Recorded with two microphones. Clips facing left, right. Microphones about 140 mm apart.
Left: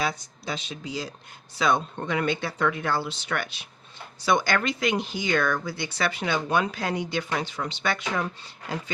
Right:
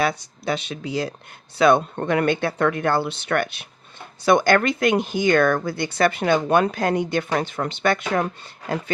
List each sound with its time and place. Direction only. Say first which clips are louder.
0.0 s speech: right 6 dB; 65° right (ahead or behind)